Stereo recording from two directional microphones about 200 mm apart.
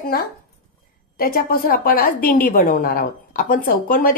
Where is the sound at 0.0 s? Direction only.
50° left (ahead or behind).